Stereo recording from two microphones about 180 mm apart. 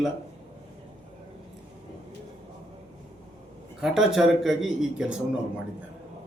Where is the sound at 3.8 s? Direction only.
Centre (ahead or behind).